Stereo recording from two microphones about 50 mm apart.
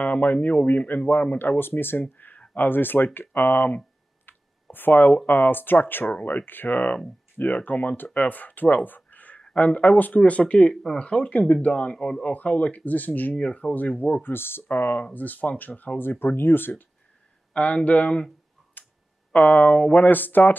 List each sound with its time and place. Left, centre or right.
0.0 s speech: left
1.6 s speech: left
2.1 s a sound: left
2.5 s speech: left
10.4 s speech: centre; by 13.3 s left
13.4 s speech: left
13.7 s speech: left
14.2 s speech: left
16.0 s speech: left
17.5 s speech: left
18.8 s clicking: left
19.3 s speech: left